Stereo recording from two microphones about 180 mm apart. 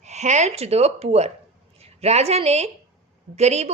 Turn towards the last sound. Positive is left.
turn(degrees=-35)  # may be behind; listen again after turning